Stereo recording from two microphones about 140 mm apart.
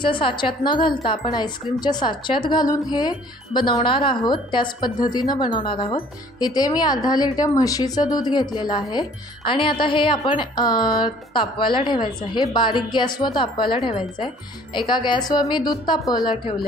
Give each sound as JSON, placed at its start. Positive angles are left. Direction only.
{"t": 0.0, "sound": "a woman's voice", "side_deg": 35}
{"t": 14.9, "sound": "a woman's voice", "side_deg": 35}